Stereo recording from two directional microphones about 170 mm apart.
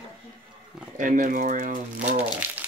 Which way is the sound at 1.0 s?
50° right (ahead or behind).